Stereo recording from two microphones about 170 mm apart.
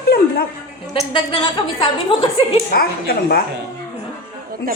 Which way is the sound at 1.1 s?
25° left (ahead or behind).